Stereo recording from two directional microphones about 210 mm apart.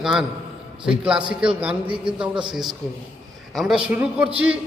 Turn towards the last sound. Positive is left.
turn(degrees=-5)  # may be behind; listen again after turning